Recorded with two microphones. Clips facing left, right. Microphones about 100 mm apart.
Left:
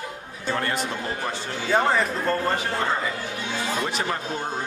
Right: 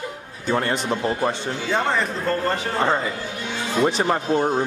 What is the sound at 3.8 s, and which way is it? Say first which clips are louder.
Speech: right 7 dB; 35° right (ahead or behind).